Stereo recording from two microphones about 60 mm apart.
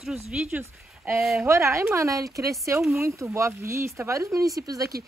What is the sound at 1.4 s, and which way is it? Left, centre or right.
Speech, right.